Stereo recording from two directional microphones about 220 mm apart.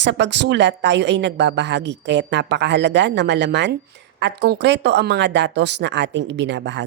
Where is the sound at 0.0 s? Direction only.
55° right (ahead or behind).